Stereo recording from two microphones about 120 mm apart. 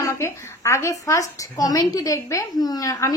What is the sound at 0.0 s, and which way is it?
A woman's voice, 25° left (ahead or behind).